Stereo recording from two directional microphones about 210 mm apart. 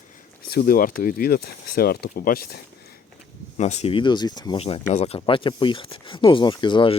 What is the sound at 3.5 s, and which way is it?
Speech, 30° left (ahead or behind).